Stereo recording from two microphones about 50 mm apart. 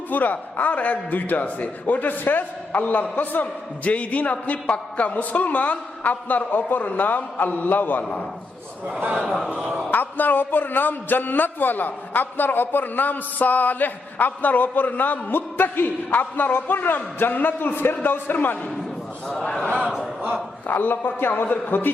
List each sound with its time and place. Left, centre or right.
0.1 s a man's voice: left
9.9 s a man's voice: left
20.7 s a man's voice: left